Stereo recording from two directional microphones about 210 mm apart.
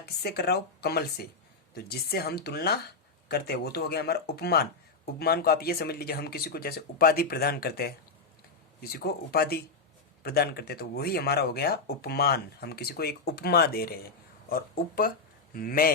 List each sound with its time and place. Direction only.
0.0 s speech: 50° left (ahead or behind)